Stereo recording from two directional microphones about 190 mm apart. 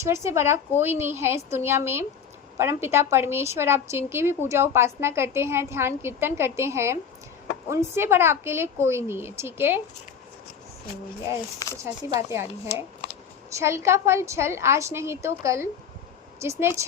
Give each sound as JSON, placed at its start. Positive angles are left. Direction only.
{"t": 0.0, "sound": "a woman's voice", "side_deg": -15}
{"t": 12.1, "sound": "a woman's voice", "side_deg": -15}
{"t": 12.6, "sound": "speech", "side_deg": 30}
{"t": 13.6, "sound": "a woman's voice", "side_deg": -15}